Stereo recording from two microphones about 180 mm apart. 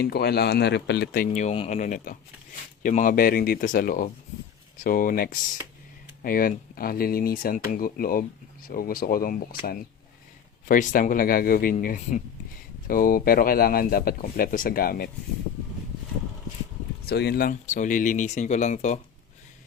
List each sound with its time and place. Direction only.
0.0 s speech: 60° left (ahead or behind)
1.3 s speech: 40° left (ahead or behind)
10.7 s speech: 45° left (ahead or behind)
17.1 s speech: 65° left (ahead or behind)
17.5 s speech: 45° left (ahead or behind)